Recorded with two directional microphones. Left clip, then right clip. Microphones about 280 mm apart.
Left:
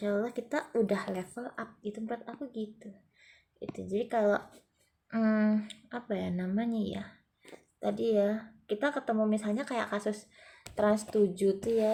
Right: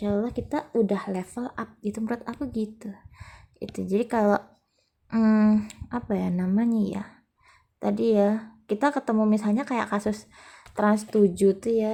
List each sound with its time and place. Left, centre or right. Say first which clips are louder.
0.0 s speech: right 4 dB; centre